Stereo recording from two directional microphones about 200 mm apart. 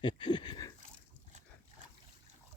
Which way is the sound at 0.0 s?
20° left (ahead or behind).